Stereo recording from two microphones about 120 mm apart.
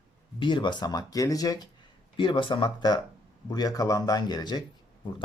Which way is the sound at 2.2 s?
45° left (ahead or behind).